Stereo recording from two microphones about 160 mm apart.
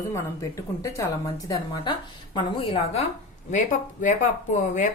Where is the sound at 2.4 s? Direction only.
35° left (ahead or behind).